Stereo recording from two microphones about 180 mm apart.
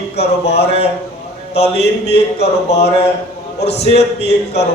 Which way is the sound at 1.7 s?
70° left (ahead or behind).